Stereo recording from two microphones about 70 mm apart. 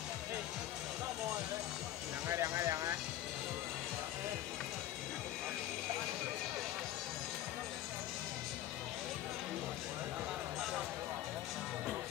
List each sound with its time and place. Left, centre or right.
2.2 s music: right